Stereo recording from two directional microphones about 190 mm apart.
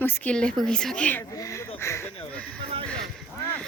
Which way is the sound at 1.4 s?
15° left (ahead or behind).